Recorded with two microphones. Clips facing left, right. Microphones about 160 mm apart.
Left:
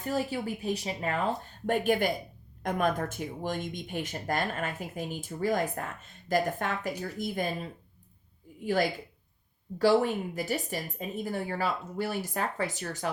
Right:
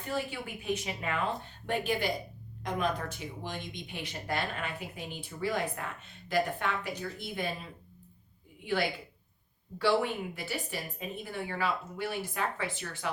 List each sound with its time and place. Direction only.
0.1 s speech: 35° left (ahead or behind)